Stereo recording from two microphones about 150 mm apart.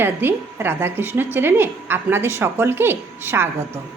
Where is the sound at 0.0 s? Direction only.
15° right (ahead or behind).